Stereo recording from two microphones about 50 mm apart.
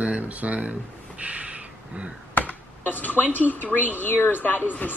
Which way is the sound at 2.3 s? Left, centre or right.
Left.